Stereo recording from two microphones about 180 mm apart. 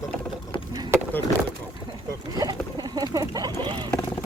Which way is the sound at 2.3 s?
20° right (ahead or behind).